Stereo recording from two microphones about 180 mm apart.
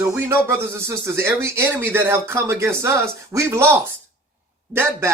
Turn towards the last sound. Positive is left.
turn(degrees=-15)  # may be behind; listen again after turning